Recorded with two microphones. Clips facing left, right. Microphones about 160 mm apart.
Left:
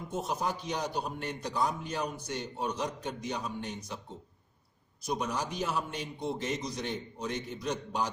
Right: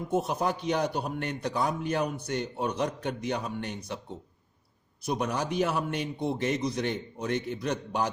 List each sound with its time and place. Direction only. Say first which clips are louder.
0.1 s a man's voice: right 5 dB; 60° right (ahead or behind)
5.0 s a man's voice: right 4 dB; 60° right (ahead or behind)